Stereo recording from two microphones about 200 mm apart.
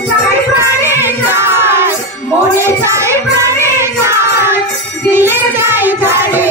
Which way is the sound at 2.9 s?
15° right (ahead or behind).